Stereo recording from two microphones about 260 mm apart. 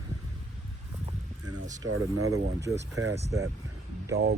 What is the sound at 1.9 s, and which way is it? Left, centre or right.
Speech, right.